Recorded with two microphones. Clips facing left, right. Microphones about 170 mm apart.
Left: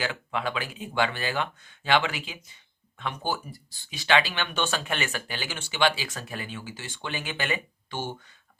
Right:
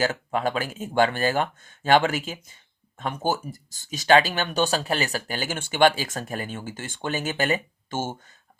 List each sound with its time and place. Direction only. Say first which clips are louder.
0.0 s speech: right 6 dB; 40° right (ahead or behind)